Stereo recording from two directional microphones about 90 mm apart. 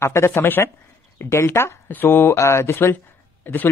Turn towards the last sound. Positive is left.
turn(degrees=20)  # may be behind; listen again after turning